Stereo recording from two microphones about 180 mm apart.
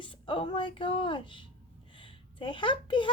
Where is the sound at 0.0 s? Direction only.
30° left (ahead or behind).